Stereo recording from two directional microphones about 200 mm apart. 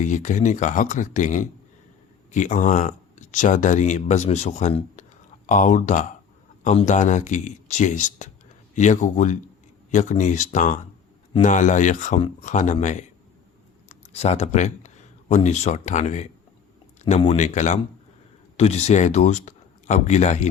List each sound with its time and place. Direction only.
0.0 s speech: 40° left (ahead or behind)